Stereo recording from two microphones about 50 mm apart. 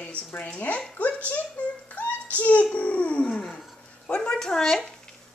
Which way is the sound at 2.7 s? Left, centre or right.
Left.